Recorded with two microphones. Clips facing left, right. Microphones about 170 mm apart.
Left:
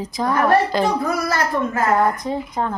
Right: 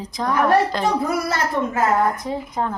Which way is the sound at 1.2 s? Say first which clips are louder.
Left 1 dB; 25° right (ahead or behind).